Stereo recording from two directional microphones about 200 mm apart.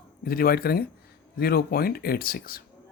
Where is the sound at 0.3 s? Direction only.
45° left (ahead or behind).